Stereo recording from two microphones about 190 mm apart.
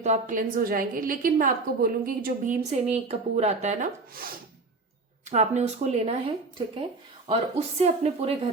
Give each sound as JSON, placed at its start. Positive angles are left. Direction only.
{"t": 0.0, "sound": "a woman's voice", "side_deg": -40}
{"t": 7.3, "sound": "speech", "side_deg": -35}